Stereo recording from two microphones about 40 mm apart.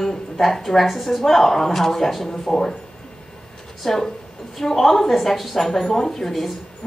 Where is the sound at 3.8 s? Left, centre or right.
Centre.